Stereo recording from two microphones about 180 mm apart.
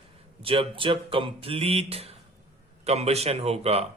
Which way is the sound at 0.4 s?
30° right (ahead or behind).